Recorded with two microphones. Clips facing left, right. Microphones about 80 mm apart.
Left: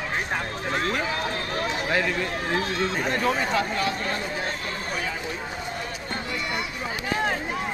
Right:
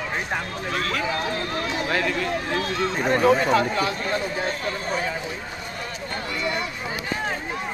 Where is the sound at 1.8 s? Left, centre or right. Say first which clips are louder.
Even; centre.